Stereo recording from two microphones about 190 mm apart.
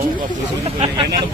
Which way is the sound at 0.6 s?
30° right (ahead or behind).